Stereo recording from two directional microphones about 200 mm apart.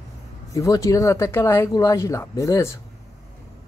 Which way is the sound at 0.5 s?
15° left (ahead or behind).